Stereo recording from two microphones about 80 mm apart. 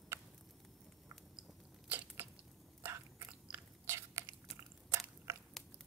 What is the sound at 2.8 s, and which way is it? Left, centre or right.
Biting, right.